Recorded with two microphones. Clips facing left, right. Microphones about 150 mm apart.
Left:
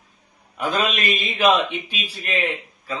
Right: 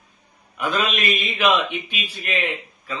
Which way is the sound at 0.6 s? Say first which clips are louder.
Left 1 dB; 35° left (ahead or behind).